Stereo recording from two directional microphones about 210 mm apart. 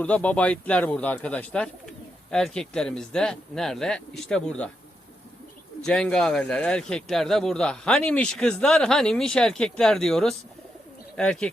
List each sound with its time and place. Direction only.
0.0 s a man's voice: 5° left (ahead or behind)
5.8 s a man's voice: 5° left (ahead or behind)